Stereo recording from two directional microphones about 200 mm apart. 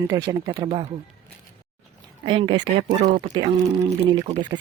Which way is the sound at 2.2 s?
25° right (ahead or behind).